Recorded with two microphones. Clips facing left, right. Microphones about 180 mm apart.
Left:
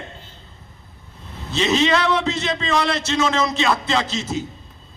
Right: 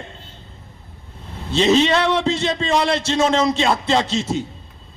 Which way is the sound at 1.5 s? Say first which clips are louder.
Right 3 dB; 30° right (ahead or behind).